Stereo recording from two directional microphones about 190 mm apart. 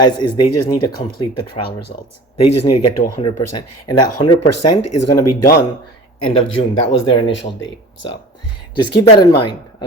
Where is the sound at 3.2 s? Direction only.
30° left (ahead or behind).